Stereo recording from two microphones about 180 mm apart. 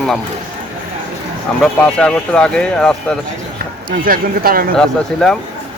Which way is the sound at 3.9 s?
55° right (ahead or behind).